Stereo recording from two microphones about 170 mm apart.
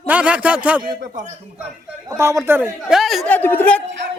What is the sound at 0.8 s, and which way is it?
Speech, 50° right (ahead or behind).